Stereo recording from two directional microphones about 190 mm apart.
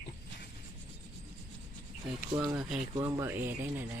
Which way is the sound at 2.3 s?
20° right (ahead or behind).